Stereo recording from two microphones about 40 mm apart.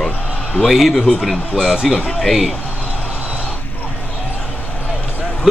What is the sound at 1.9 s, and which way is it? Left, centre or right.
Speech, right.